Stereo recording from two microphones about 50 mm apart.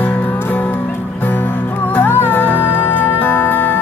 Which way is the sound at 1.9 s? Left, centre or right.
Left.